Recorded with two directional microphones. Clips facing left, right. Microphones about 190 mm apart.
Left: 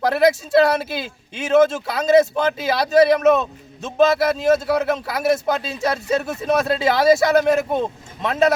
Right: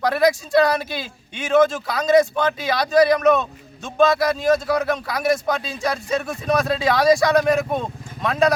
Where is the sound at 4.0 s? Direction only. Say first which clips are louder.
Left 1 dB; 25° left (ahead or behind).